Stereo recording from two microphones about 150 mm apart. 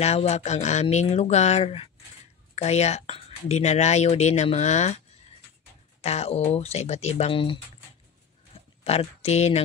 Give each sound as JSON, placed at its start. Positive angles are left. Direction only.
{"t": 0.0, "sound": "speech", "side_deg": 45}
{"t": 5.9, "sound": "speech", "side_deg": 45}
{"t": 8.8, "sound": "speech", "side_deg": 45}